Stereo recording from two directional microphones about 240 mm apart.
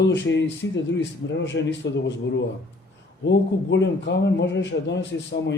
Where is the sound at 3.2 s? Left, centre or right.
Left.